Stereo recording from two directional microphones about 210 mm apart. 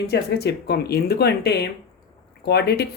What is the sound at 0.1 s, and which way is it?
Speech, 50° left (ahead or behind).